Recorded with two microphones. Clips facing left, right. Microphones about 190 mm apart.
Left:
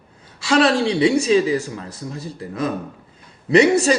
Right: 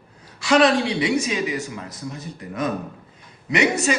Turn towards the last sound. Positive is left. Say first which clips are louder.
# left 7 dB
turn(degrees=35)  # may be behind; listen again after turning